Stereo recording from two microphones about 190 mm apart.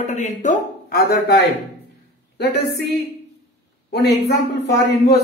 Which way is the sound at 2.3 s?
60° left (ahead or behind).